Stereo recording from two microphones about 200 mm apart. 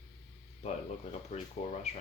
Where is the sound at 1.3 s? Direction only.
35° left (ahead or behind).